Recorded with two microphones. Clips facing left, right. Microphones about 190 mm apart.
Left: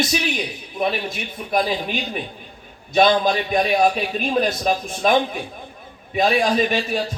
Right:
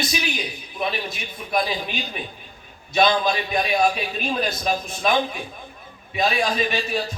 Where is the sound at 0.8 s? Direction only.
50° left (ahead or behind).